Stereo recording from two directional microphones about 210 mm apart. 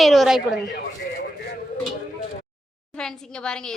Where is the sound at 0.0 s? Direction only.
Centre (ahead or behind).